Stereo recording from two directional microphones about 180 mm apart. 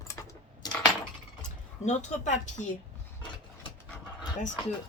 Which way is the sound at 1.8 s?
40° left (ahead or behind).